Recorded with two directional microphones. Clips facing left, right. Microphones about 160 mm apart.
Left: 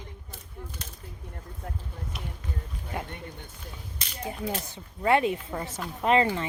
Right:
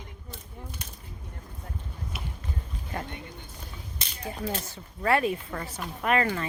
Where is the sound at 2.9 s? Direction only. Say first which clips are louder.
Even; 10° left (ahead or behind).